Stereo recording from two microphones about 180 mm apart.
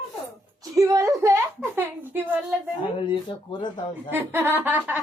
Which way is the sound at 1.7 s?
10° right (ahead or behind).